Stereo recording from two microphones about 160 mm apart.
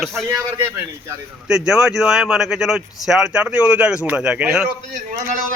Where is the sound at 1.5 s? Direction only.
5° right (ahead or behind).